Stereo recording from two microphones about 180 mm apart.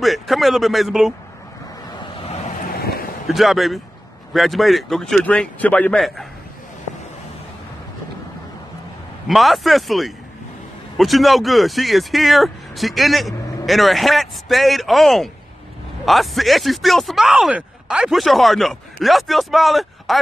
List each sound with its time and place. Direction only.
0.0 s speech: centre (ahead or behind)
2.1 s vehicle: 35° left (ahead or behind)
2.6 s vehicle: 55° left (ahead or behind)
3.3 s speech: centre (ahead or behind)
9.3 s speech: centre (ahead or behind)